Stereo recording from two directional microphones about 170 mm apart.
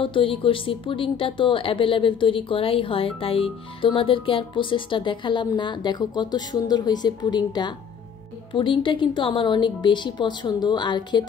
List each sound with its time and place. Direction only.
0.0 s a woman's voice: 30° left (ahead or behind)